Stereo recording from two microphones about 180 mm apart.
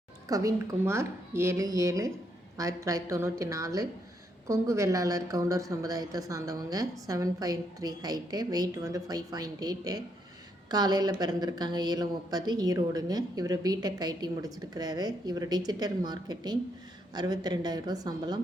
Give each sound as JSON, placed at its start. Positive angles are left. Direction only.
{"t": 0.3, "sound": "a woman's voice", "side_deg": -20}